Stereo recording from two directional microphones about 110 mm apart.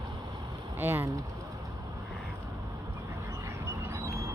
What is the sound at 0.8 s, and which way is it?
Speech, 20° right (ahead or behind).